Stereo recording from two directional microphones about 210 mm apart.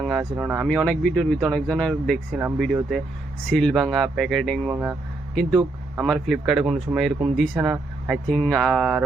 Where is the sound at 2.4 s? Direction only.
10° right (ahead or behind).